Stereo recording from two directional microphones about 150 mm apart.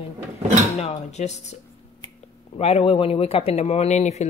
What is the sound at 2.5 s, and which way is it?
Speech, 45° left (ahead or behind).